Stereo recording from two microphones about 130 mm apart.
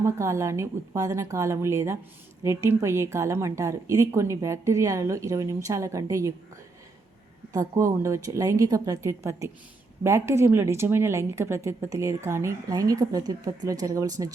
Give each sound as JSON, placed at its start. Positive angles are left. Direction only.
{"t": 0.0, "sound": "a woman's voice", "side_deg": -20}
{"t": 7.5, "sound": "a woman's voice", "side_deg": -25}